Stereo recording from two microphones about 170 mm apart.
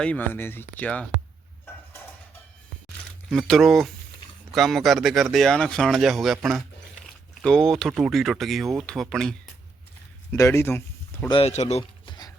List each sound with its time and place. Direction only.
0.0 s speech: 10° left (ahead or behind)
3.2 s speech: 5° left (ahead or behind)
10.3 s speech: 15° left (ahead or behind)
11.3 s speech: 35° left (ahead or behind)